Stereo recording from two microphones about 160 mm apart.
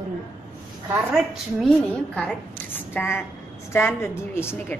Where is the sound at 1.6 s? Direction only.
5° left (ahead or behind).